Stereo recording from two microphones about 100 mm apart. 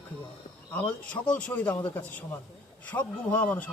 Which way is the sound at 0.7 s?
15° left (ahead or behind).